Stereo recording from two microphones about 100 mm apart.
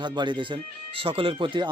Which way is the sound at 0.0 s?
50° right (ahead or behind).